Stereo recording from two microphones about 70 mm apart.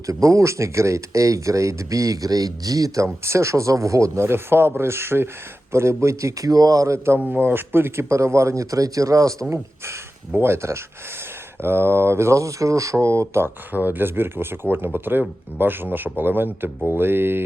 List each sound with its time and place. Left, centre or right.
0.0 s speech: right
6.5 s speech: right
7.2 s speech: right
13.7 s speech: right